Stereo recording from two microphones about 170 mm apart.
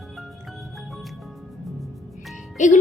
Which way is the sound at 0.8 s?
Centre (ahead or behind).